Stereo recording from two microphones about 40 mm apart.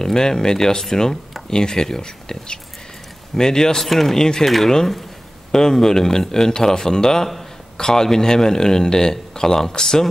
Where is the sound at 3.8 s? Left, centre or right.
Centre.